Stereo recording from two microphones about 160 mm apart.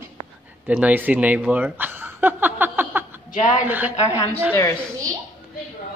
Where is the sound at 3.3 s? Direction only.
50° left (ahead or behind).